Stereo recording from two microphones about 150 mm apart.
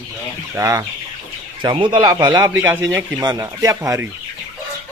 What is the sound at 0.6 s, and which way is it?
Speech, 20° right (ahead or behind).